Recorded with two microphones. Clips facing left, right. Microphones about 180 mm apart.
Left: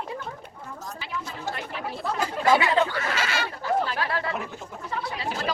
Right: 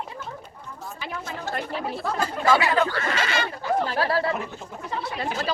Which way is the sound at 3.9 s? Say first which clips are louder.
Right 5 dB; 35° right (ahead or behind).